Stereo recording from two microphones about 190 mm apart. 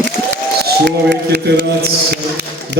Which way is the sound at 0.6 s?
60° right (ahead or behind).